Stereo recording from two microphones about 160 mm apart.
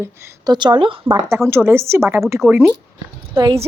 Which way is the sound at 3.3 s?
35° right (ahead or behind).